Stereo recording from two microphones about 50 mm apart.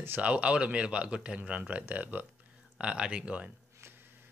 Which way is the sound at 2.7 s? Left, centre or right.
Centre.